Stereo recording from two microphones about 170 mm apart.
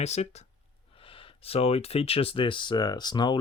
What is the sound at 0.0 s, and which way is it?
Speech, 40° left (ahead or behind).